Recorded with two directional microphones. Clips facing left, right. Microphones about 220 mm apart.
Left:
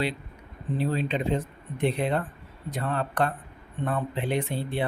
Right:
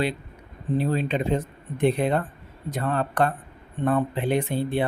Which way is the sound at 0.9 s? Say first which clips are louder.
Right 2 dB; 45° right (ahead or behind).